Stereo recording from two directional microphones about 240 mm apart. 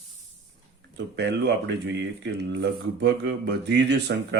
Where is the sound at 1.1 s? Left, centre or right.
Right.